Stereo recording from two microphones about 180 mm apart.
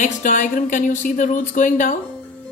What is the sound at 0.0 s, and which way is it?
Speech, 45° left (ahead or behind).